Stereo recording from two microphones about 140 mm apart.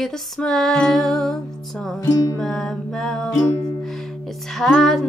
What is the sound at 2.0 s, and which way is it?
Music, 25° left (ahead or behind).